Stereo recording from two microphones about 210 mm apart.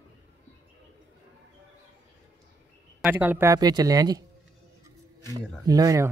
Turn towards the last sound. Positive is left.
turn(degrees=-15)  # may be behind; listen again after turning